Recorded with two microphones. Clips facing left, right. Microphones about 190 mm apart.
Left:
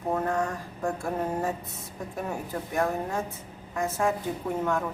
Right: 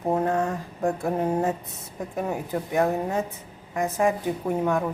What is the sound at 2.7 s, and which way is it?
A woman's voice, 20° right (ahead or behind).